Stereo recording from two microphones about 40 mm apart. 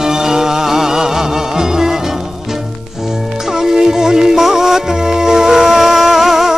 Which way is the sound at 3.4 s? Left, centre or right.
Centre.